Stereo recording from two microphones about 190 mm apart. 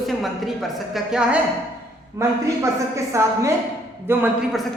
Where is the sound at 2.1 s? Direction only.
15° right (ahead or behind).